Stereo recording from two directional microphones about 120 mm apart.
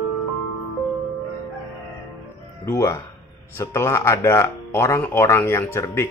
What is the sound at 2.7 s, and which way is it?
Speech, 25° left (ahead or behind).